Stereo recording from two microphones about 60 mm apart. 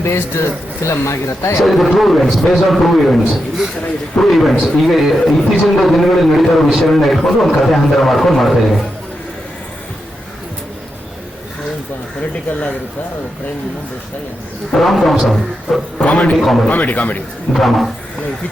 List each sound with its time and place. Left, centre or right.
0.0 s speech: left
1.6 s a man's voice: centre
14.7 s a man's voice: centre
16.0 s a man's voice: left
16.4 s a man's voice: centre
16.6 s a man's voice: left
17.5 s a man's voice: centre